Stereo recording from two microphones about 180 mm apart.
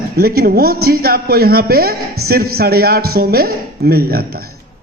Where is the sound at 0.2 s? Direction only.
55° right (ahead or behind).